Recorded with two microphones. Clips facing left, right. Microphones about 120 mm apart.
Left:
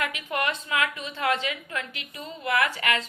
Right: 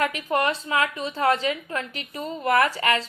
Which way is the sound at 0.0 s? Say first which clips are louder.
Right 5 dB; 35° right (ahead or behind).